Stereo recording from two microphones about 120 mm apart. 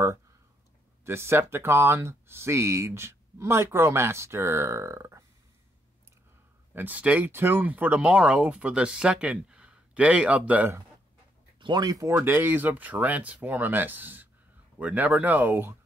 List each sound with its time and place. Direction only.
1.0 s speech: 20° right (ahead or behind)
6.7 s speech: 15° right (ahead or behind)
11.6 s speech: 35° right (ahead or behind); by 15.7 s 15° right (ahead or behind)